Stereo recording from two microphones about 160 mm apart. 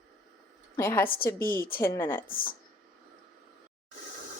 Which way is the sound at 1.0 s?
65° left (ahead or behind).